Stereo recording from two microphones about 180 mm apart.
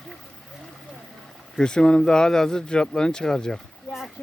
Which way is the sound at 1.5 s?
5° left (ahead or behind).